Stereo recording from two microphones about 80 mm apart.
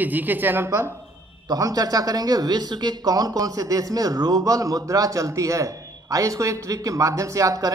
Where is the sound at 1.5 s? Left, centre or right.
Right.